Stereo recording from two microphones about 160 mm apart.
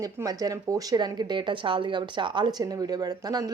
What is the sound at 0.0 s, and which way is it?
Speech, 20° right (ahead or behind).